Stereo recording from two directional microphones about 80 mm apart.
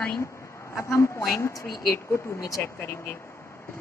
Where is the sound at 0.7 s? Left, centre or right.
Left.